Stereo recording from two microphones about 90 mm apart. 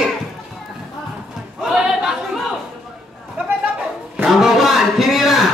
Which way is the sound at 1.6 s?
5° right (ahead or behind).